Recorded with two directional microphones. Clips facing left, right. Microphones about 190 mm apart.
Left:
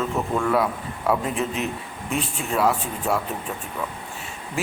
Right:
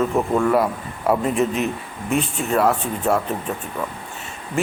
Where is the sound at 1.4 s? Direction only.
45° right (ahead or behind).